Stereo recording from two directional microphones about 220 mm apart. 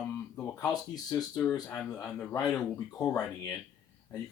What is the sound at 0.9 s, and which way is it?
Speech, 15° left (ahead or behind).